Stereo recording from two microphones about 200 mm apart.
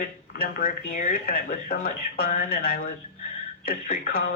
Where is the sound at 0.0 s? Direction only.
45° left (ahead or behind).